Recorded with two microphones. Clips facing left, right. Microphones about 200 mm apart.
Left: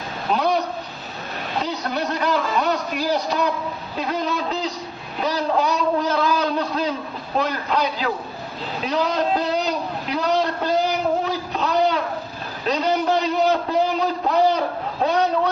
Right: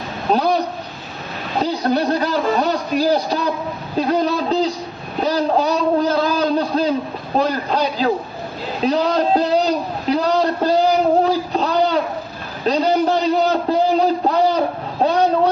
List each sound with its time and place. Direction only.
0.3 s a man's voice: 35° right (ahead or behind)
1.6 s a man's voice: 35° right (ahead or behind)
8.8 s a sound: 35° right (ahead or behind)
15.0 s vehicle: 30° right (ahead or behind)